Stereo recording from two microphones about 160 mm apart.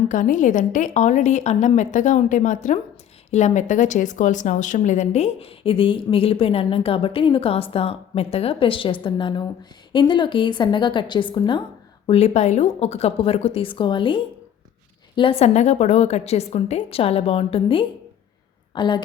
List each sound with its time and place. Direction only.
0.1 s a woman's voice: 55° left (ahead or behind); by 19.0 s 30° left (ahead or behind)